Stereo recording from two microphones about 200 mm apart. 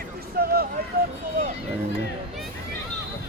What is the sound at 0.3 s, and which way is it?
Run, 50° right (ahead or behind).